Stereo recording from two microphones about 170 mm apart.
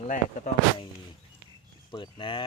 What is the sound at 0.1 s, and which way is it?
Speech, 45° left (ahead or behind).